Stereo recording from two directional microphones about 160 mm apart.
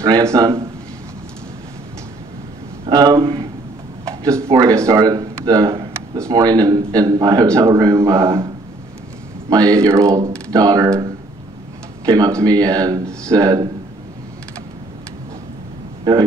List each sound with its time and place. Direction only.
0.0 s a man's voice: 20° right (ahead or behind)
2.9 s speech: 25° right (ahead or behind)
4.2 s speech: 20° right (ahead or behind)
9.5 s speech: 20° right (ahead or behind)
12.1 s speech: 20° right (ahead or behind)